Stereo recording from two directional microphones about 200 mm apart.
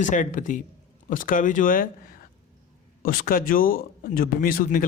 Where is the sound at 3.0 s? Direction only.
45° left (ahead or behind).